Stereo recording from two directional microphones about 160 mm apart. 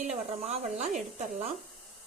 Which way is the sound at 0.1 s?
45° right (ahead or behind).